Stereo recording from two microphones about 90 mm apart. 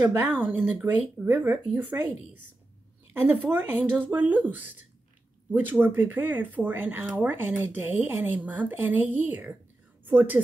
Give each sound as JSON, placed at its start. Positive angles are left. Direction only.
{"t": 0.0, "sound": "speech", "side_deg": -20}
{"t": 3.4, "sound": "a woman's voice", "side_deg": -25}